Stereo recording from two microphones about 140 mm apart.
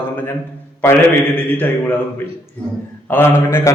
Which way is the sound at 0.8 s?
20° left (ahead or behind).